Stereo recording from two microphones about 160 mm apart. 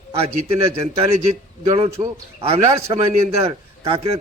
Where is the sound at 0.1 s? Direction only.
40° right (ahead or behind).